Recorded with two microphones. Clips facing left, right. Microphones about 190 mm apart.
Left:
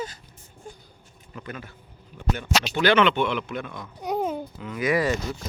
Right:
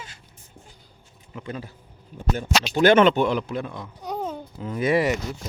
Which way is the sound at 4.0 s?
10° left (ahead or behind).